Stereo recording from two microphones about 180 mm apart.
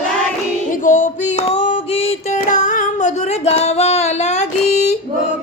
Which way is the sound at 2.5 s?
45° left (ahead or behind).